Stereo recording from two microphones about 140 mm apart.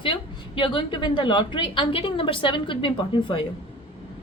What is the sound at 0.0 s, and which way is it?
A woman's voice, 35° left (ahead or behind).